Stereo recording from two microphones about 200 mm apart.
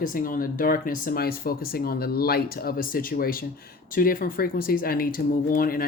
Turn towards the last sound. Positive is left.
turn(degrees=45)  # may be behind; listen again after turning